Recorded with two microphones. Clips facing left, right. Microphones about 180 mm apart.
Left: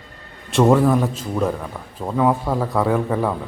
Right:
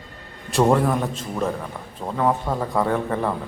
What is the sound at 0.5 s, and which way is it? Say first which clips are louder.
A man's voice: left 4 dB; centre (ahead or behind).